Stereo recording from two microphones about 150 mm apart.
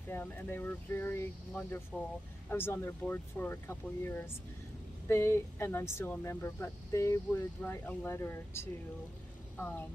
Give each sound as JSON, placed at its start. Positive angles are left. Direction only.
{"t": 0.1, "sound": "speech", "side_deg": 15}